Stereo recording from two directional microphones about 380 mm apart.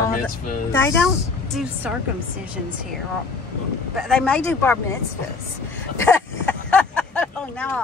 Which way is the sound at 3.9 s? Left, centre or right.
Centre.